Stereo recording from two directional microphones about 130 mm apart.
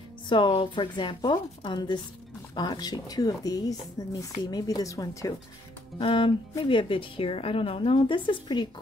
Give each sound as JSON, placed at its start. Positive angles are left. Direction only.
{"t": 0.3, "sound": "speech", "side_deg": 40}
{"t": 5.9, "sound": "a woman's voice", "side_deg": 40}